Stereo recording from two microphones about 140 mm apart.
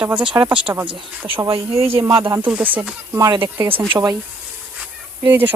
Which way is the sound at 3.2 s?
25° right (ahead or behind).